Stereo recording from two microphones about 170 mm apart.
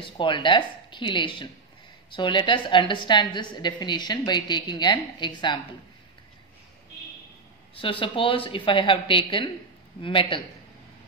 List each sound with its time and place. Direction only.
0.0 s a woman's voice: 30° left (ahead or behind)
7.7 s a woman's voice: 30° left (ahead or behind)